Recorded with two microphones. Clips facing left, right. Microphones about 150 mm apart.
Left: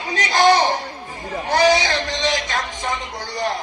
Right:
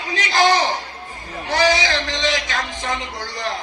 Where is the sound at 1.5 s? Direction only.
45° left (ahead or behind).